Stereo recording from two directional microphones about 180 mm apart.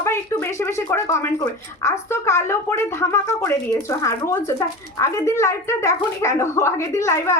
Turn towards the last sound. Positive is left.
turn(degrees=15)  # may be behind; listen again after turning